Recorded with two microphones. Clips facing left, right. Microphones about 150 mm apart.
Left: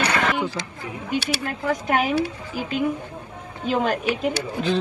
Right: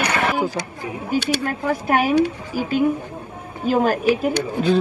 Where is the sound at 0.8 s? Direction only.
35° right (ahead or behind).